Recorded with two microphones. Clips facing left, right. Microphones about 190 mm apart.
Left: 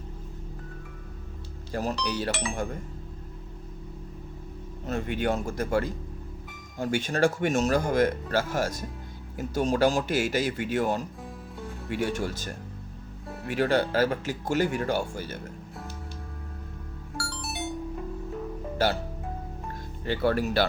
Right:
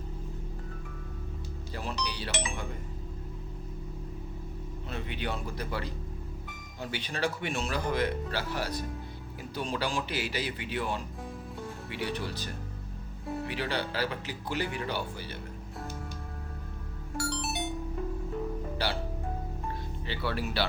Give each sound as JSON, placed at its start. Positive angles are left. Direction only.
{"t": 1.7, "sound": "speech", "side_deg": 45}
{"t": 4.9, "sound": "speech", "side_deg": 45}
{"t": 17.2, "sound": "music", "side_deg": -20}
{"t": 18.8, "sound": "music", "side_deg": 45}
{"t": 20.1, "sound": "speech", "side_deg": 45}